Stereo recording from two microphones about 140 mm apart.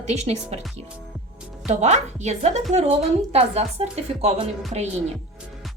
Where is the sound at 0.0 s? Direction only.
50° right (ahead or behind).